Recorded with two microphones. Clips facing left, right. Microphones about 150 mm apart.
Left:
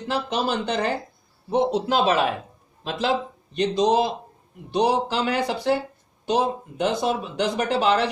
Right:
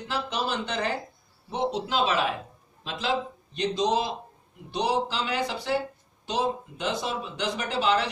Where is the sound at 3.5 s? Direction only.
55° left (ahead or behind).